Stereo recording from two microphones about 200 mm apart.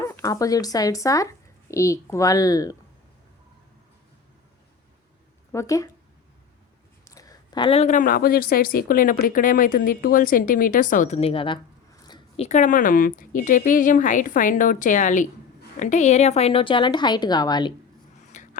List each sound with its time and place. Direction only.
0.0 s speech: 15° left (ahead or behind)
5.5 s speech: 15° left (ahead or behind)
7.0 s speech: 15° left (ahead or behind)
12.0 s a sound: 20° left (ahead or behind)
12.5 s a woman's voice: 40° left (ahead or behind); by 17.7 s 20° left (ahead or behind)
18.3 s a sound: 40° left (ahead or behind)